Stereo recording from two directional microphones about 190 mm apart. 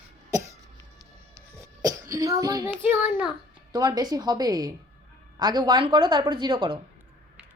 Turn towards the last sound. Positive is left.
turn(degrees=-25)  # may be behind; listen again after turning